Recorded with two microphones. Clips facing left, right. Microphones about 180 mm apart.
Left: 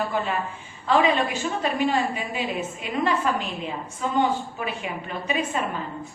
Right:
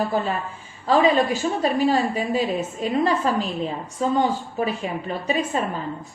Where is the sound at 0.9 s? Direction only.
35° right (ahead or behind).